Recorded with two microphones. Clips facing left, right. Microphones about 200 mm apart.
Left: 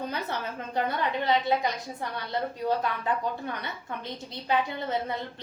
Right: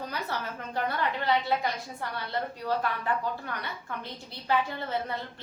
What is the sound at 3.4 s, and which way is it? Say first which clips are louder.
A woman's voice: left 2 dB; 20° left (ahead or behind).